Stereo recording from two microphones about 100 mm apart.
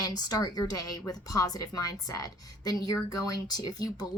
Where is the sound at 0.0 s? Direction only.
40° left (ahead or behind).